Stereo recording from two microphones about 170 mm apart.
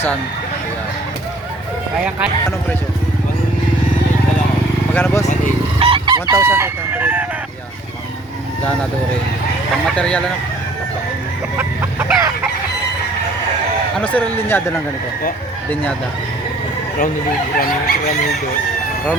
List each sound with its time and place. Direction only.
2.0 s speech: 5° right (ahead or behind)
4.9 s speech: 15° left (ahead or behind)
5.8 s chicken: 30° right (ahead or behind)
6.3 s speech: 10° right (ahead or behind)
9.9 s speech: 5° left (ahead or behind)
11.5 s chicken: 10° right (ahead or behind)
14.0 s speech: 10° left (ahead or behind)
17.6 s chicken: 65° left (ahead or behind)